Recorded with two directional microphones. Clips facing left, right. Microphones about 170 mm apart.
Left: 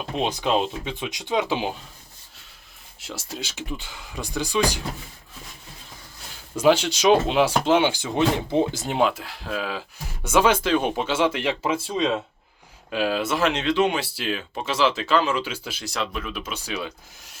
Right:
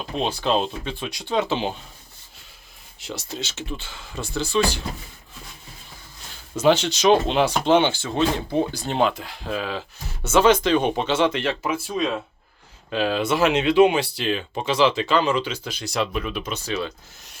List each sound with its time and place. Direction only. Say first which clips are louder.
0.2 s speech: even; 15° left (ahead or behind)
3.0 s speech: right 2 dB; 5° left (ahead or behind)
6.6 s speech: even; 10° left (ahead or behind)
8.8 s speech: even; 5° left (ahead or behind)
11.6 s speech: left 1 dB; 25° left (ahead or behind)
12.9 s speech: right 2 dB; 5° left (ahead or behind); by 14.0 s 10° right (ahead or behind)
14.0 s speech: right 3 dB; 5° left (ahead or behind)